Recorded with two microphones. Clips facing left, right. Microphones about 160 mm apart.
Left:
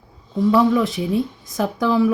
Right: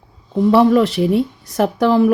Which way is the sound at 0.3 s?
65° right (ahead or behind).